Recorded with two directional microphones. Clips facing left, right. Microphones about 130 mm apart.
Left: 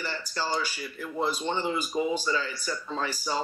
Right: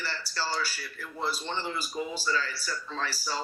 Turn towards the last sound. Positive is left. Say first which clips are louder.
# left 3 dB
turn(degrees=15)  # may be behind; listen again after turning